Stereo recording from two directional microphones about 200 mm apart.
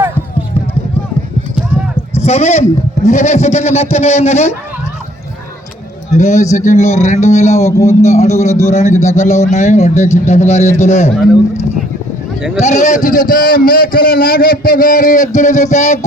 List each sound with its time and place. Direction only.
2.1 s a man's voice: 30° left (ahead or behind)
6.1 s a man's voice: 35° left (ahead or behind)
7.7 s a man's voice: 15° left (ahead or behind)
8.0 s a man's voice: 35° left (ahead or behind)
12.5 s a man's voice: 35° left (ahead or behind)